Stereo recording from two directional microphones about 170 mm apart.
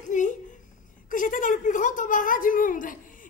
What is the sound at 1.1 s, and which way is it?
A woman's voice, 50° left (ahead or behind).